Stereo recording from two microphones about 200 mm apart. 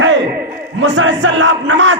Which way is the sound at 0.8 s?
70° right (ahead or behind).